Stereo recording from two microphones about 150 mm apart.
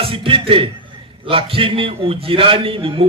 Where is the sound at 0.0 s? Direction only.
35° right (ahead or behind).